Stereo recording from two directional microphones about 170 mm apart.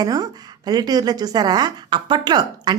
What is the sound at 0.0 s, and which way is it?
A woman's voice, 25° right (ahead or behind).